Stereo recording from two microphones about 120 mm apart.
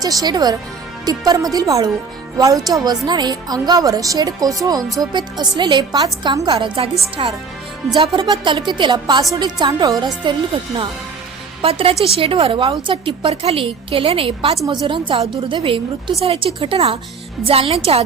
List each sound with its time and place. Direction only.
0.0 s a woman's voice: 30° right (ahead or behind)
7.2 s a woman's voice: 50° right (ahead or behind)
11.6 s a woman's voice: 50° right (ahead or behind)
14.7 s a woman's voice: 40° right (ahead or behind)